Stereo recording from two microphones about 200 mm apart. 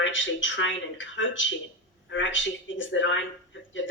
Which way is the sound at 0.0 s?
70° left (ahead or behind).